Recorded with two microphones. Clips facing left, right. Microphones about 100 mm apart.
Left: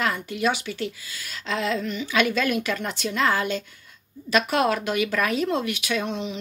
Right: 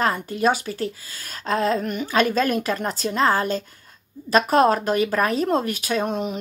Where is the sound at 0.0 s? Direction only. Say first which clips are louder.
Right 4 dB; 40° right (ahead or behind).